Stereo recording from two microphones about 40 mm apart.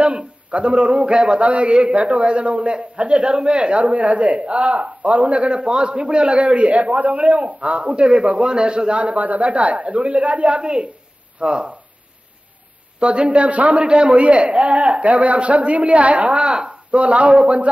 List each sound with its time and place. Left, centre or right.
0.0 s a man's voice: right
1.4 s a man's voice: right
13.0 s a man's voice: right
13.8 s a man's voice: right
16.3 s speech: right
17.0 s a man's voice: right